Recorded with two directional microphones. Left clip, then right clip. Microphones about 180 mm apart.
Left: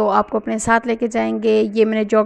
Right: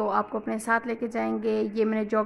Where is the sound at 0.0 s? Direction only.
35° left (ahead or behind).